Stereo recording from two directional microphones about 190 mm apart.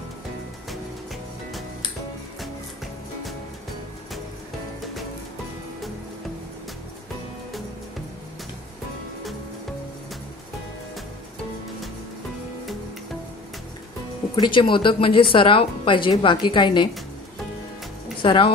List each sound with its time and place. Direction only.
14.3 s a woman's voice: 25° left (ahead or behind)
18.2 s speech: 25° left (ahead or behind)